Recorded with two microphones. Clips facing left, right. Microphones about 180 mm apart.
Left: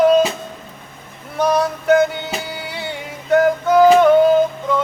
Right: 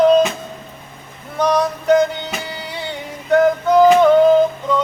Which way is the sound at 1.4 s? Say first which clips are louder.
Even; 5° left (ahead or behind).